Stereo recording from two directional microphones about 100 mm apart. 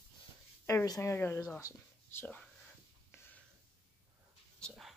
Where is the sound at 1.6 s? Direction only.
25° left (ahead or behind).